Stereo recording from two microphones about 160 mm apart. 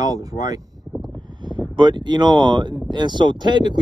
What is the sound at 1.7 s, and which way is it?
Speech, 30° right (ahead or behind).